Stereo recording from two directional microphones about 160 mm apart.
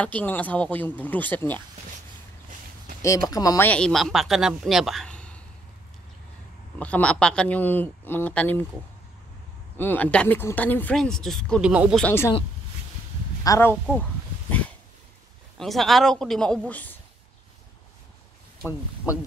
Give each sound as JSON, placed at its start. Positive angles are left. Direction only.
{"t": 0.0, "sound": "speech", "side_deg": 10}
{"t": 3.0, "sound": "speech", "side_deg": 20}
{"t": 6.8, "sound": "speech", "side_deg": 5}
{"t": 9.8, "sound": "speech", "side_deg": 10}
{"t": 13.4, "sound": "speech", "side_deg": 20}
{"t": 15.5, "sound": "speech", "side_deg": 0}
{"t": 18.6, "sound": "speech", "side_deg": -75}